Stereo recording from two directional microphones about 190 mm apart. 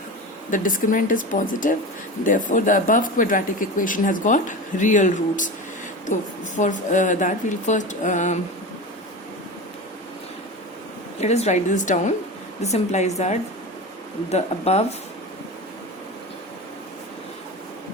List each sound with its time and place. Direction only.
0.5 s speech: 45° left (ahead or behind)
6.6 s speech: 40° left (ahead or behind)
11.2 s speech: 35° left (ahead or behind)